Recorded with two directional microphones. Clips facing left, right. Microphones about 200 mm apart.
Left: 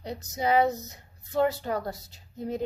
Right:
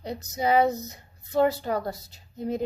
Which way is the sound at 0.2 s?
15° right (ahead or behind).